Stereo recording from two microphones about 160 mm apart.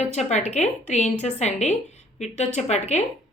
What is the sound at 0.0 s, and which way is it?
A woman's voice, 45° left (ahead or behind).